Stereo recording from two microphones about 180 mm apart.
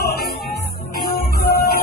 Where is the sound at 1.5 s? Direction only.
55° left (ahead or behind).